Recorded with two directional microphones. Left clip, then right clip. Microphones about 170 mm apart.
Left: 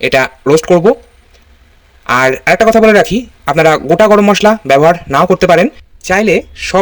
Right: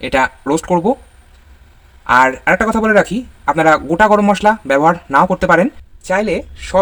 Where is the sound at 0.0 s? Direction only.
25° left (ahead or behind).